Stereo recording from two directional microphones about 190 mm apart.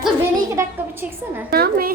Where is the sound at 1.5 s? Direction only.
50° right (ahead or behind).